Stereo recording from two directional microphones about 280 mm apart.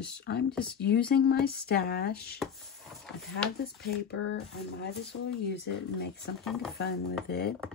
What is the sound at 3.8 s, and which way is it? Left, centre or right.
Speech, left.